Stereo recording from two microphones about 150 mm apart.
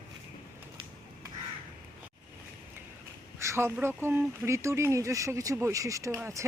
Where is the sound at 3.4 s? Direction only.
15° right (ahead or behind).